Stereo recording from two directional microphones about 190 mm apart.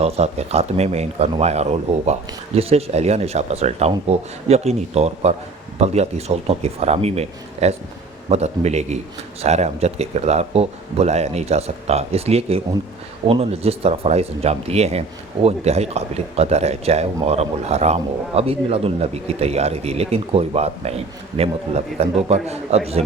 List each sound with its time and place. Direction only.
0.0 s a man's voice: 35° right (ahead or behind)